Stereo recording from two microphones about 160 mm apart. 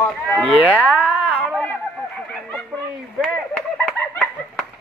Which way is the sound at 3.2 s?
5° left (ahead or behind).